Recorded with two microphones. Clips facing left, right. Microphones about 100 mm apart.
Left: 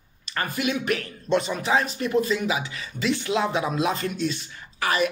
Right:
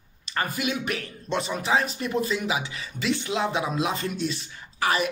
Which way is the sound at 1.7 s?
40° left (ahead or behind).